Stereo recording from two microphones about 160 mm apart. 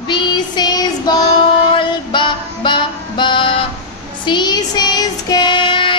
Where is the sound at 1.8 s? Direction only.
30° left (ahead or behind).